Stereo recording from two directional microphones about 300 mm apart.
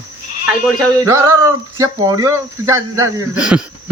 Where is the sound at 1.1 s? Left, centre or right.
Centre.